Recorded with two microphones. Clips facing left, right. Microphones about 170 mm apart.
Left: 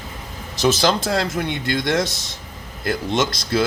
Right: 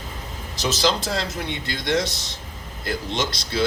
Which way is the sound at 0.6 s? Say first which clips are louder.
Left 5 dB; 55° left (ahead or behind).